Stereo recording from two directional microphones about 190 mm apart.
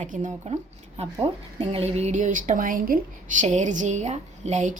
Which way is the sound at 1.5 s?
30° right (ahead or behind).